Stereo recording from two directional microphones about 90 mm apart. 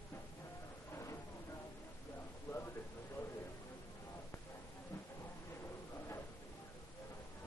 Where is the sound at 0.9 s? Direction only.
35° left (ahead or behind).